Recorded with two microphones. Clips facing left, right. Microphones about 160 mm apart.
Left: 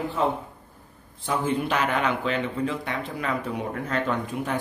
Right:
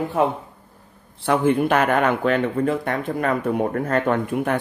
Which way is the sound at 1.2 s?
65° right (ahead or behind).